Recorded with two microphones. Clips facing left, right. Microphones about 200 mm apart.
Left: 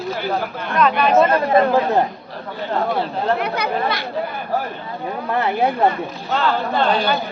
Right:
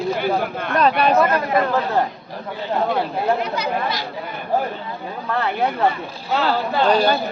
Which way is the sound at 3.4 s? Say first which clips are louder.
Left 2 dB; 60° left (ahead or behind).